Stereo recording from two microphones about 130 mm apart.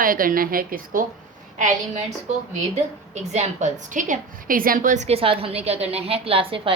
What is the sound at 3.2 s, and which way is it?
A woman's voice, 65° right (ahead or behind).